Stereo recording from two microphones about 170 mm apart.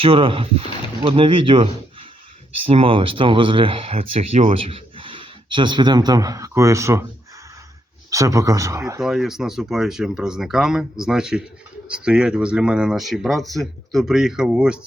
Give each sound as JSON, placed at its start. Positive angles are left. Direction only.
{"t": 0.0, "sound": "speech", "side_deg": -30}
{"t": 8.1, "sound": "speech", "side_deg": -20}
{"t": 9.0, "sound": "speech", "side_deg": 0}